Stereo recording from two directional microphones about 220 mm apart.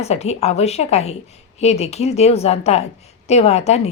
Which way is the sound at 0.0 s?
30° left (ahead or behind).